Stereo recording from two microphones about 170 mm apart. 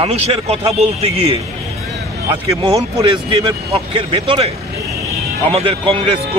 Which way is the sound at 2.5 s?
20° right (ahead or behind).